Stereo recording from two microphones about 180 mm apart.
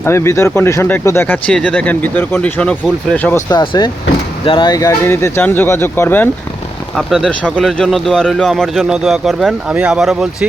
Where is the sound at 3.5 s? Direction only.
25° left (ahead or behind).